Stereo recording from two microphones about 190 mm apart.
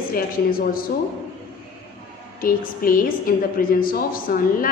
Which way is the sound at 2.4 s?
50° left (ahead or behind).